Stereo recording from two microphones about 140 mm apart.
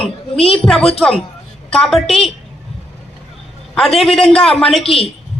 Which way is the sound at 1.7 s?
5° left (ahead or behind).